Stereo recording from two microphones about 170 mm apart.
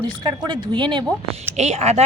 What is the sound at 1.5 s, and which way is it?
Speech, 40° right (ahead or behind).